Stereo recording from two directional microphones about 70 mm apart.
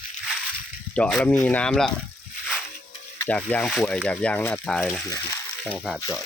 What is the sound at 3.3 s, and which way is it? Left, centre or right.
Speech, left.